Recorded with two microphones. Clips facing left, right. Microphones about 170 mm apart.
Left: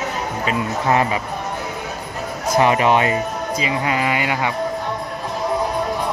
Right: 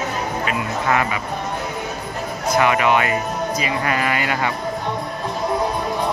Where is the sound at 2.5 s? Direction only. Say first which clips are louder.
Left 2 dB; 30° left (ahead or behind); by 4.5 s 15° left (ahead or behind).